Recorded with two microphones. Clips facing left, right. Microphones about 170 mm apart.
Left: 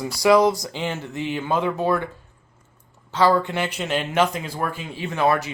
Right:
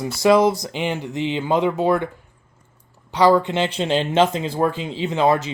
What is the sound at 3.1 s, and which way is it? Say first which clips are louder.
Speech: right 3 dB; 15° right (ahead or behind).